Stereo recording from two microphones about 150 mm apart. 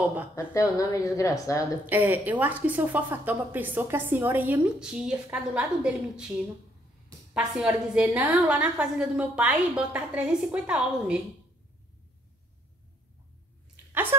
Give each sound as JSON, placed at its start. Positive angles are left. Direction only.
{"t": 0.5, "sound": "a woman's voice", "side_deg": 20}
{"t": 1.9, "sound": "a woman's voice", "side_deg": -10}
{"t": 7.3, "sound": "a woman's voice", "side_deg": -5}